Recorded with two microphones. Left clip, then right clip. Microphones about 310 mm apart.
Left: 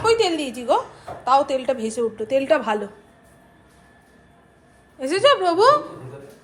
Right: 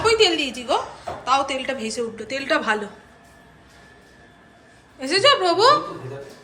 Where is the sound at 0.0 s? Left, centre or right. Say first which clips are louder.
Right 1 dB; centre.